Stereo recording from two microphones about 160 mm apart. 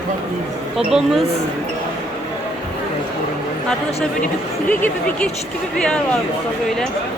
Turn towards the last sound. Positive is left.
turn(degrees=10)  # may be behind; listen again after turning